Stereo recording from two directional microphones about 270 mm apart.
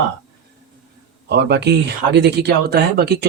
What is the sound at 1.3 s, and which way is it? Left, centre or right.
Speech, right.